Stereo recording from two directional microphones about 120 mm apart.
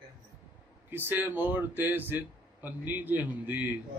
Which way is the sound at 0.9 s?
15° right (ahead or behind).